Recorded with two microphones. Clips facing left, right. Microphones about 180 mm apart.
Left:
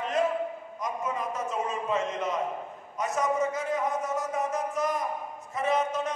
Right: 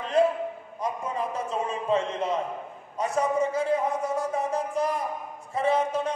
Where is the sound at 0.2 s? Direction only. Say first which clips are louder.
Right 6 dB; 30° right (ahead or behind).